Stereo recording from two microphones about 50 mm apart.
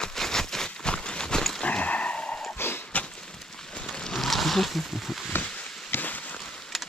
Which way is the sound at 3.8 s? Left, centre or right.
Centre.